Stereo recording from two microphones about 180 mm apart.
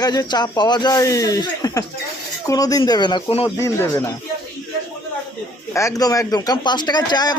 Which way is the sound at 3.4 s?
15° left (ahead or behind).